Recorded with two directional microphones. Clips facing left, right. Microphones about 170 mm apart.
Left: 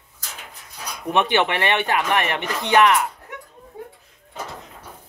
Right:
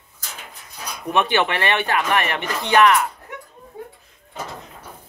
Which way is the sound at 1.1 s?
20° left (ahead or behind).